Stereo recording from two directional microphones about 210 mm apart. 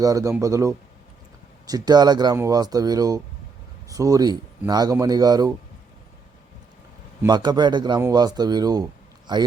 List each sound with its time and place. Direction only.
0.0 s speech: 15° right (ahead or behind)
7.2 s a man's voice: 20° right (ahead or behind)